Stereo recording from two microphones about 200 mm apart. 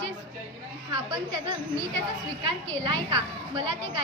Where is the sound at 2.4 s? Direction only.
25° right (ahead or behind).